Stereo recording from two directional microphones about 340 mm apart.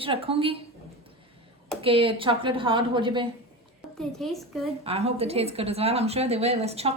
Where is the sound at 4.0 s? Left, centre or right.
Centre.